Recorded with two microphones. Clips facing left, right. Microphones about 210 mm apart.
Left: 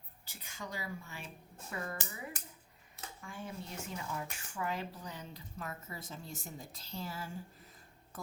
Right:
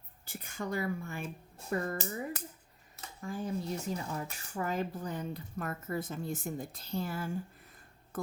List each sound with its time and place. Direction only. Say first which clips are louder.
0.3 s speech: right 8 dB; 55° right (ahead or behind)